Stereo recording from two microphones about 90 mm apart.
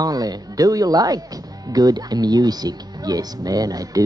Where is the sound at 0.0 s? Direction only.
45° right (ahead or behind).